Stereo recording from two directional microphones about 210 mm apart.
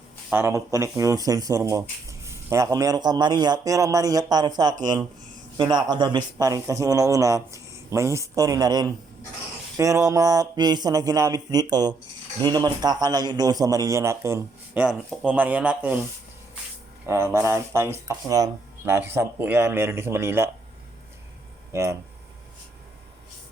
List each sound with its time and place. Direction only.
0.3 s speech: 10° right (ahead or behind)
17.1 s speech: 10° right (ahead or behind)
21.7 s speech: 10° right (ahead or behind)